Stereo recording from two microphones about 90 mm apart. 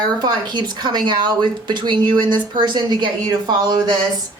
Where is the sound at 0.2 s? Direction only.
55° right (ahead or behind).